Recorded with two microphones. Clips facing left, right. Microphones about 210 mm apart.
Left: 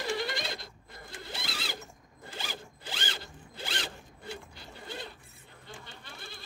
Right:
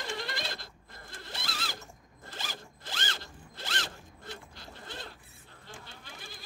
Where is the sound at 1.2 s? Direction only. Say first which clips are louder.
Left 1 dB; centre (ahead or behind).